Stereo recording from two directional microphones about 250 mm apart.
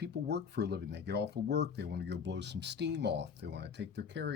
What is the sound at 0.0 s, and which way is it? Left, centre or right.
A man's voice, right.